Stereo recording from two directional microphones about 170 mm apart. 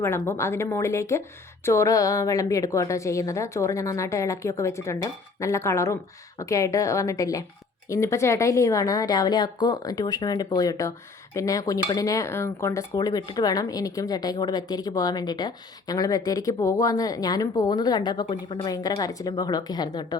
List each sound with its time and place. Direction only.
0.0 s a woman's voice: 15° left (ahead or behind)